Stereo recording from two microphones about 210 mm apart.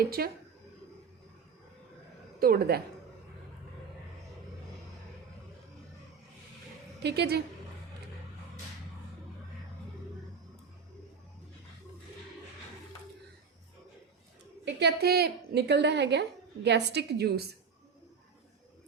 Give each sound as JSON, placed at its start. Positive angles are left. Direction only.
{"t": 0.0, "sound": "a woman's voice", "side_deg": -45}
{"t": 2.4, "sound": "a woman's voice", "side_deg": -45}
{"t": 7.0, "sound": "a woman's voice", "side_deg": -50}
{"t": 14.6, "sound": "a woman's voice", "side_deg": -55}